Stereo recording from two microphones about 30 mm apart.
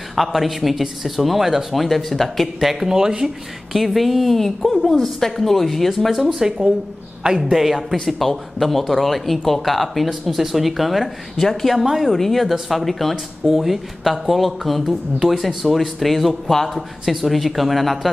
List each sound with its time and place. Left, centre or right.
0.1 s speech: centre
2.6 s a woman's voice: centre
2.9 s speech: right
3.7 s a woman's voice: centre
7.5 s a woman's voice: centre
7.9 s a woman's voice: centre
12.1 s speech: centre
13.5 s a woman's voice: centre